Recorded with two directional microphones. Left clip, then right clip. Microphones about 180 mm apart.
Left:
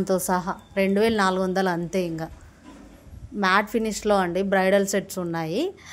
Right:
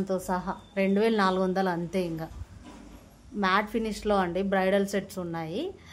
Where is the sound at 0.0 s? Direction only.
20° left (ahead or behind).